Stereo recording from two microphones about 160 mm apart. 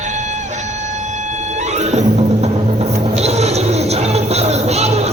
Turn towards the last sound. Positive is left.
turn(degrees=-40)  # may be behind; listen again after turning